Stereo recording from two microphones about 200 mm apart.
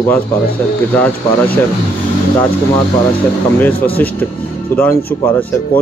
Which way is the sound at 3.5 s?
10° left (ahead or behind).